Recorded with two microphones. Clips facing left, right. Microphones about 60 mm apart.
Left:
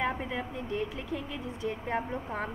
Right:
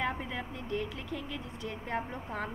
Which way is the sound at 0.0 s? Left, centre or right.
Centre.